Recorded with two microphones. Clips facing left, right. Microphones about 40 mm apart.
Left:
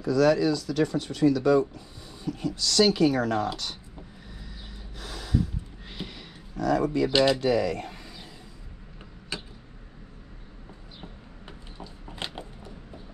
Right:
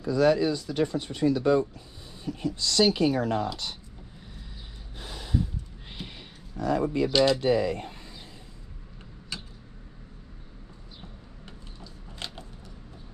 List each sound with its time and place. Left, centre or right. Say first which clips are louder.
0.0 s speech: left 1 dB; right
2.0 s a sound: left 2 dB; centre
2.5 s speech: left 1 dB; right
3.0 s speech: left 2 dB; left
5.0 s gasp: left 1 dB; left
6.6 s a sound: left 2 dB; left
7.1 s speech: even; centre
7.3 s speech: even; right
9.3 s tick-tock: left 3 dB; left
11.4 s a sound: left 4 dB; left